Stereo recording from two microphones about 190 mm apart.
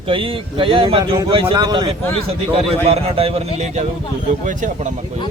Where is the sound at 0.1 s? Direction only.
30° right (ahead or behind).